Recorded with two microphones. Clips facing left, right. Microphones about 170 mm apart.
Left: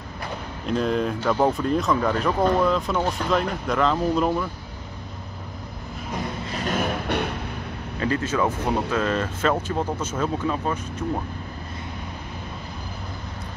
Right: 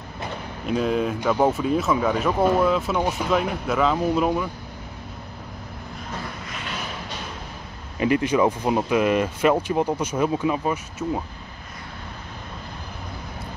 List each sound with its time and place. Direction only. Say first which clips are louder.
0.7 s speech: right 1 dB; 5° right (ahead or behind)
6.5 s a sound: left 11 dB; 45° left (ahead or behind)
8.0 s speech: right 4 dB; 15° right (ahead or behind)